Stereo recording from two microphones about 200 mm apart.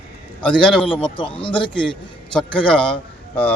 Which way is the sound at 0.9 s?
25° left (ahead or behind).